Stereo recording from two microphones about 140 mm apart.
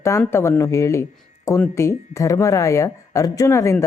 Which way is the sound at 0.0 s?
20° left (ahead or behind).